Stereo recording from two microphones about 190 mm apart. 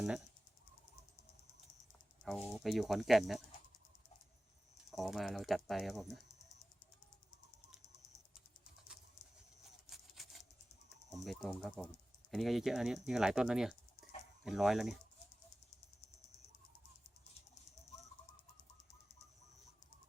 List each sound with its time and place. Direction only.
2.2 s speech: centre (ahead or behind)
4.9 s speech: centre (ahead or behind)
10.2 s a sound: centre (ahead or behind)
11.3 s speech: centre (ahead or behind)